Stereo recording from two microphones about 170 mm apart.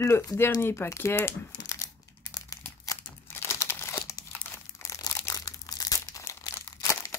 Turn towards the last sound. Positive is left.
turn(degrees=20)  # may be behind; listen again after turning